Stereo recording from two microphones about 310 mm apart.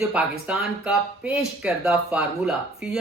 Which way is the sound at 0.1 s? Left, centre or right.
Centre.